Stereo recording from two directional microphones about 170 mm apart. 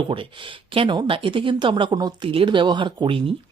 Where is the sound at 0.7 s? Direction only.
30° right (ahead or behind).